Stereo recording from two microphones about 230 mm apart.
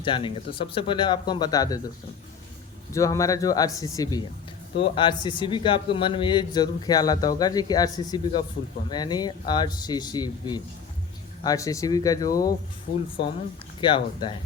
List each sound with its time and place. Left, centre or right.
0.0 s a man's voice: left
2.9 s a man's voice: centre
13.8 s a man's voice: left